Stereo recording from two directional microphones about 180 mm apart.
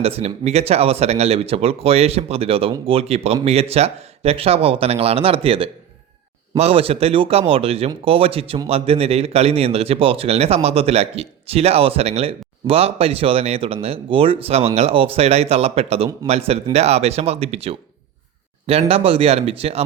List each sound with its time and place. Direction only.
0.0 s speech: 35° right (ahead or behind)